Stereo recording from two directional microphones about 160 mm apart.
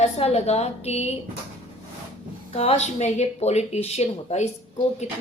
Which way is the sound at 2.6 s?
40° left (ahead or behind).